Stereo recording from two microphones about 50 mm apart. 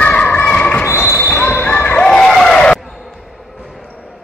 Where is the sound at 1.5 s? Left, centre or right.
Left.